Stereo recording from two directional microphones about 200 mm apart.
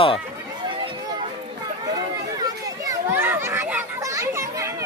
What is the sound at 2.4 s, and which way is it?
Children playing, 15° right (ahead or behind).